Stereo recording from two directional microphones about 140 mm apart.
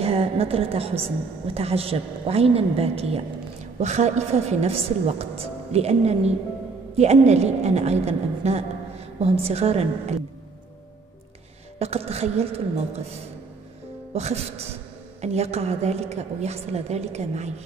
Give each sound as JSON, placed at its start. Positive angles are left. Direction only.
{"t": 0.0, "sound": "a woman's voice", "side_deg": -45}
{"t": 11.8, "sound": "a woman's voice", "side_deg": -45}
{"t": 14.1, "sound": "a woman's voice", "side_deg": -50}